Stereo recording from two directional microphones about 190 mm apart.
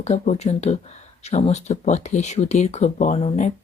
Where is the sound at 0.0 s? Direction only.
35° left (ahead or behind).